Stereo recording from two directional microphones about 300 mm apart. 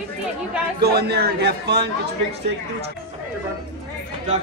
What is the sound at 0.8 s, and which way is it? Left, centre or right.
A woman's voice, right.